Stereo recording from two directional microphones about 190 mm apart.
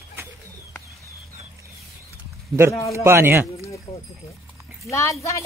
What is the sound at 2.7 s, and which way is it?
Speech, 15° left (ahead or behind).